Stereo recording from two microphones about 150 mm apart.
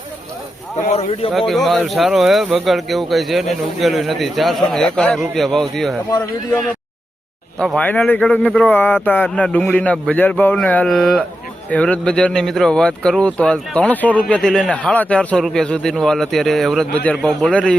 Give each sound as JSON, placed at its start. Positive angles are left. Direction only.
{"t": 0.9, "sound": "speech", "side_deg": 45}
{"t": 1.3, "sound": "speech", "side_deg": 0}
{"t": 7.8, "sound": "speech", "side_deg": 10}